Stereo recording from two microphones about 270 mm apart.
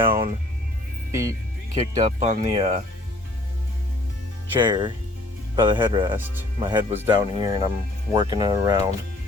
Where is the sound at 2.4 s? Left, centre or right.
Centre.